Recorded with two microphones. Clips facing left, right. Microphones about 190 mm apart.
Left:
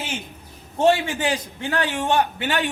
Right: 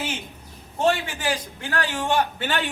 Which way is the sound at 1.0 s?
25° left (ahead or behind).